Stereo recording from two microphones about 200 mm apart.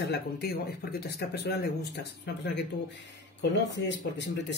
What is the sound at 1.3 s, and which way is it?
Speech, 55° left (ahead or behind).